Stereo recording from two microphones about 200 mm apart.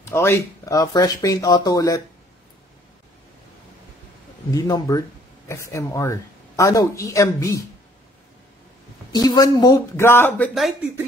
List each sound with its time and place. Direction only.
0.0 s speech: 15° left (ahead or behind)
4.5 s speech: 20° left (ahead or behind)
9.1 s speech: 20° left (ahead or behind); by 10.9 s centre (ahead or behind)